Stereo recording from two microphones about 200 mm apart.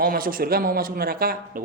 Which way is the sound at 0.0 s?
45° right (ahead or behind).